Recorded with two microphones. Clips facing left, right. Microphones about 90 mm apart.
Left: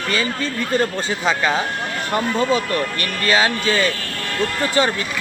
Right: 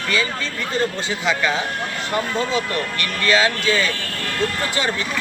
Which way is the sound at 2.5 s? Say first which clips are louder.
Left 2 dB; 40° left (ahead or behind).